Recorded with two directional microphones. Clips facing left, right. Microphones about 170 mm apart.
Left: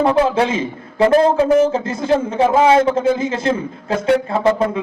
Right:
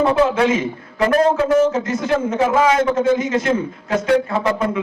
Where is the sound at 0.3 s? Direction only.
30° left (ahead or behind).